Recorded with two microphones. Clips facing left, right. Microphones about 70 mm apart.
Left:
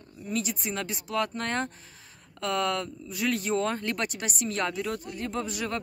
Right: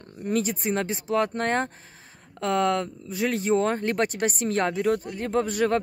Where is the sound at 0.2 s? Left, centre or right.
Right.